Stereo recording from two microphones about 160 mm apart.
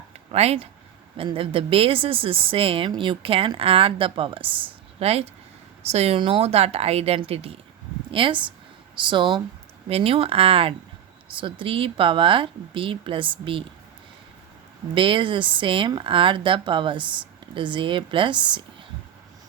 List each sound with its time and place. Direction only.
0.3 s a woman's voice: 40° right (ahead or behind)
14.9 s a woman's voice: 35° right (ahead or behind)